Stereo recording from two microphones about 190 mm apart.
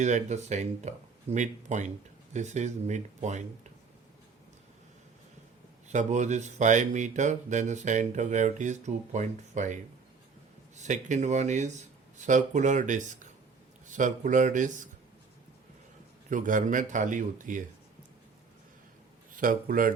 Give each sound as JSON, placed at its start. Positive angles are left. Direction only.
{"t": 0.0, "sound": "speech", "side_deg": -40}
{"t": 5.9, "sound": "speech", "side_deg": -40}
{"t": 16.3, "sound": "speech", "side_deg": -45}
{"t": 19.4, "sound": "speech", "side_deg": -45}